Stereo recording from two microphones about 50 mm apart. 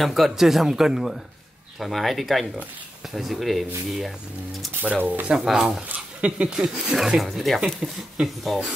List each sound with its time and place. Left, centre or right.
0.0 s speech: centre
4.8 s speech: right
5.3 s speech: centre
5.9 s speech: right
7.2 s speech: centre
7.6 s speech: centre